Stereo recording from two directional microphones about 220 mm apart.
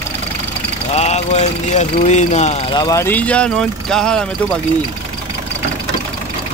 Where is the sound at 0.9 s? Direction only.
30° left (ahead or behind).